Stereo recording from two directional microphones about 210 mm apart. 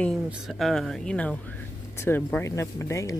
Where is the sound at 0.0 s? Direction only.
Centre (ahead or behind).